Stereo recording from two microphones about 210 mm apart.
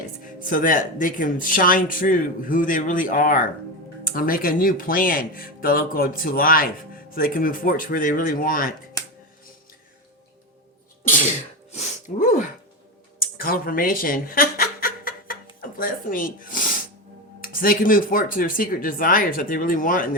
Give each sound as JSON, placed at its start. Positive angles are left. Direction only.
{"t": 0.3, "sound": "speech", "side_deg": 40}
{"t": 11.7, "sound": "a sound", "side_deg": 35}
{"t": 15.6, "sound": "speech", "side_deg": 40}